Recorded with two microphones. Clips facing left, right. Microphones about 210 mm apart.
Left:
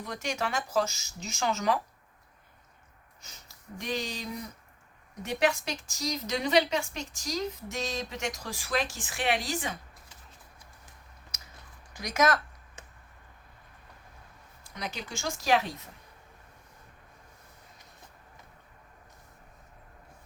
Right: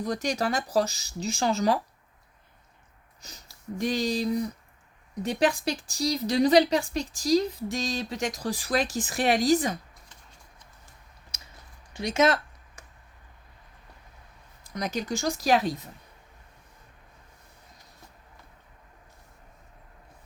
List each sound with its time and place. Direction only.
0.0 s a woman's voice: 35° right (ahead or behind)
3.2 s a woman's voice: 35° right (ahead or behind)
11.9 s speech: 25° right (ahead or behind)
14.7 s a woman's voice: 40° right (ahead or behind)